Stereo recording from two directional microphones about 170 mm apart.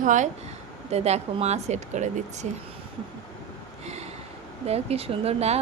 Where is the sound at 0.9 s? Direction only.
40° right (ahead or behind).